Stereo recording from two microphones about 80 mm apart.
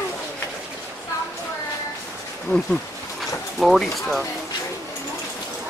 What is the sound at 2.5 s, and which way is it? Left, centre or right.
Speech, left.